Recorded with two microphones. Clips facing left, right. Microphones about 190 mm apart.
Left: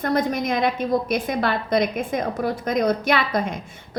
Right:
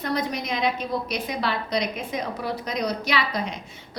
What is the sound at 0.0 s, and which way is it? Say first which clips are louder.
A woman's voice: left 5 dB; 50° left (ahead or behind).